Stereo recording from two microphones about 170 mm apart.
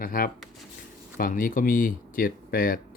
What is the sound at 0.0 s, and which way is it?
Speech, 55° left (ahead or behind).